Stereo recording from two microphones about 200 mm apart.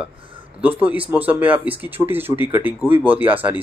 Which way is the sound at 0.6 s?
10° right (ahead or behind).